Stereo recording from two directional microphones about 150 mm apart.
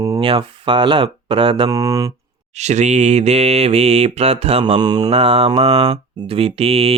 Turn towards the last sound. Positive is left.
turn(degrees=-40)  # may be behind; listen again after turning